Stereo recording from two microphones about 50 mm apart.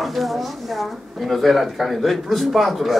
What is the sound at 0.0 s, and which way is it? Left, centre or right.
Speech, centre.